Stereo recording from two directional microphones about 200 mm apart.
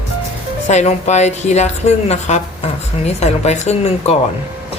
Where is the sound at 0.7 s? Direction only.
35° left (ahead or behind).